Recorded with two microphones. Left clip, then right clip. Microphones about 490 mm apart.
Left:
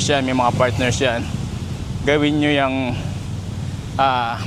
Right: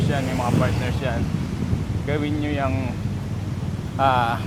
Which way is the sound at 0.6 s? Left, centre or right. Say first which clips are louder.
Left 8 dB; left.